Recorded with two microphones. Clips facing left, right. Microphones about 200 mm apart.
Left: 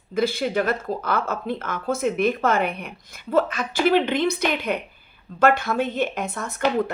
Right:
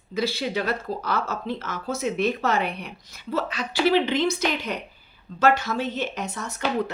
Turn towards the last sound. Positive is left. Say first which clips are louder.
# left 3 dB
turn(degrees=55)  # may be behind; listen again after turning